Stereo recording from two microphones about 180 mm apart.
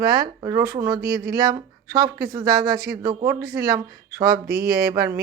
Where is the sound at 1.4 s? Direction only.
15° right (ahead or behind).